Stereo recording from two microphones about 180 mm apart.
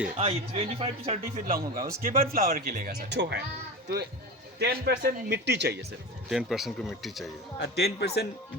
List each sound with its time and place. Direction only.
0.2 s speech: 30° right (ahead or behind)
1.5 s speech: 50° right (ahead or behind); by 5.8 s 65° right (ahead or behind)
6.3 s speech: centre (ahead or behind)
7.6 s a man's voice: 65° left (ahead or behind)